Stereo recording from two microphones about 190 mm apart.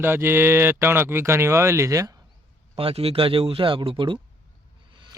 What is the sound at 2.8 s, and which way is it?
Speech, 30° right (ahead or behind).